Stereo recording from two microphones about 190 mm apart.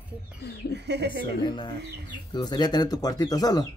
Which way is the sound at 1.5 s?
25° left (ahead or behind).